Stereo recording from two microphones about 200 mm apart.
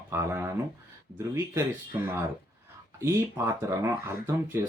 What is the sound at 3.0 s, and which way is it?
Speech, 15° right (ahead or behind).